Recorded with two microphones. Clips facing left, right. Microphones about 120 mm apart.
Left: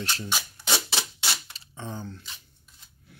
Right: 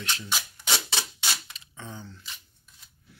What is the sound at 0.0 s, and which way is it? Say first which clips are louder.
Rub: left 2 dB; 40° left (ahead or behind).